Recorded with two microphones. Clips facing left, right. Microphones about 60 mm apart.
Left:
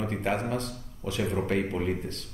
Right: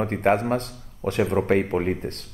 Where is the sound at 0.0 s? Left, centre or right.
Right.